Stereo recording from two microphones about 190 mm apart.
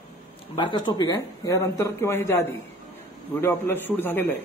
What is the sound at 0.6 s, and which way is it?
A man's voice, 25° left (ahead or behind).